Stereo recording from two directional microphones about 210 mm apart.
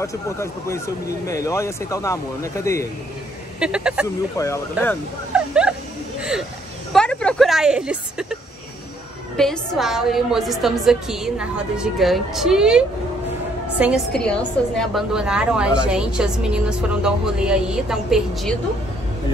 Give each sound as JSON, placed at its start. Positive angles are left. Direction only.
{"t": 0.0, "sound": "speech", "side_deg": 15}
{"t": 3.5, "sound": "a woman's voice", "side_deg": -5}
{"t": 4.4, "sound": "speech", "side_deg": 15}
{"t": 5.3, "sound": "dog", "side_deg": -5}
{"t": 6.9, "sound": "a sound", "side_deg": 5}
{"t": 9.4, "sound": "a woman's voice", "side_deg": 0}
{"t": 14.1, "sound": "a woman's voice", "side_deg": 5}